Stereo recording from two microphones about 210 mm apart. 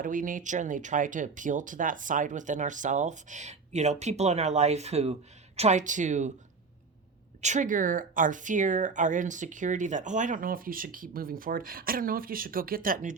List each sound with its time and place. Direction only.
0.0 s speech: 40° right (ahead or behind)
7.4 s speech: 35° right (ahead or behind)